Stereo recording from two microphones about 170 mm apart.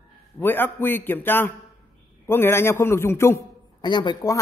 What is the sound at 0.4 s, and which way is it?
A man's voice, 10° left (ahead or behind).